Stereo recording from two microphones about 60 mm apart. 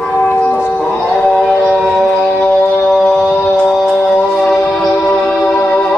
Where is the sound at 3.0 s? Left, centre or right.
Centre.